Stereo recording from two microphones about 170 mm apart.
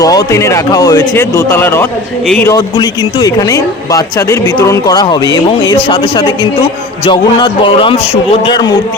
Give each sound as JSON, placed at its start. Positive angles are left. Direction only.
{"t": 0.0, "sound": "speech", "side_deg": 20}
{"t": 2.4, "sound": "speech", "side_deg": 20}